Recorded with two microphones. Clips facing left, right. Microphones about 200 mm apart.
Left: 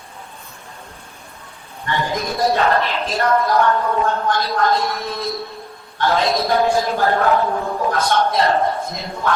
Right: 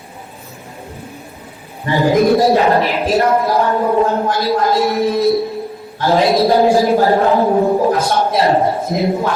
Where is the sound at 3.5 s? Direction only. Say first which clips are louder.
Right 4 dB; 25° right (ahead or behind).